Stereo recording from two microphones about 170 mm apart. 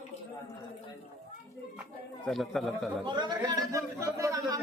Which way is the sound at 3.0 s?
25° right (ahead or behind).